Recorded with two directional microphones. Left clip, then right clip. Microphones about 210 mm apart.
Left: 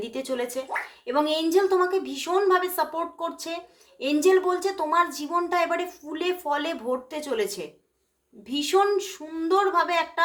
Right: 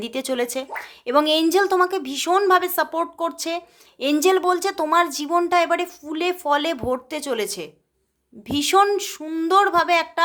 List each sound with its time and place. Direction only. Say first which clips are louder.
0.0 s a woman's voice: right 5 dB; 45° right (ahead or behind)